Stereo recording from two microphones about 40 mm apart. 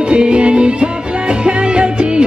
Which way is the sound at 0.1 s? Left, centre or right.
Right.